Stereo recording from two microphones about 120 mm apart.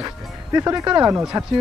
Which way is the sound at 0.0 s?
25° right (ahead or behind).